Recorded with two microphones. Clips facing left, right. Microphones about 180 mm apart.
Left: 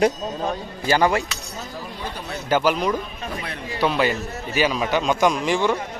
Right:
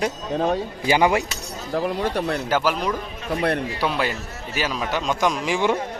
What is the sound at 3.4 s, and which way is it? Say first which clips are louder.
Speech: right 11 dB; 65° right (ahead or behind).